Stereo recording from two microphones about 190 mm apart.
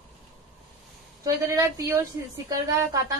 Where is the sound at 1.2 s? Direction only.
15° right (ahead or behind).